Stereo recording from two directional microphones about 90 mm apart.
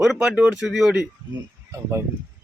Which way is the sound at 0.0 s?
5° right (ahead or behind).